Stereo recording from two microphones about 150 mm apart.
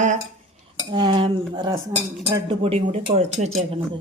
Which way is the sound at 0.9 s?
35° right (ahead or behind).